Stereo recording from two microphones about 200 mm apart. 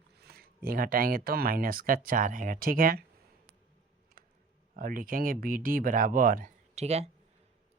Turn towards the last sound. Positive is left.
turn(degrees=-30)  # may be behind; listen again after turning